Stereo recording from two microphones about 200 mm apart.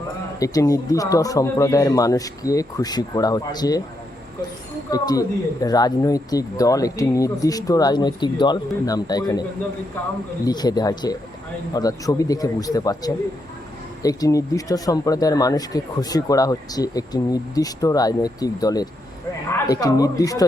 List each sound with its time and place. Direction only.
0.3 s speech: 15° left (ahead or behind)
4.9 s speech: 20° left (ahead or behind)
10.4 s speech: 20° left (ahead or behind)